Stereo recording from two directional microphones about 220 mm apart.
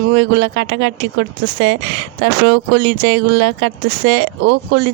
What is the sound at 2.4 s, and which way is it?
Speech, 55° right (ahead or behind).